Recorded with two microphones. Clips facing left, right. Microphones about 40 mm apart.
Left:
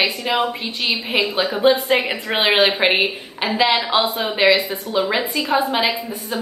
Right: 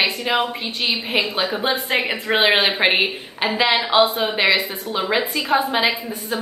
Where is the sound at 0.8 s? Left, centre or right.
Right.